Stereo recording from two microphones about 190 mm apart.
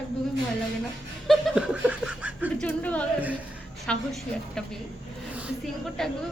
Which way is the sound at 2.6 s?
10° left (ahead or behind).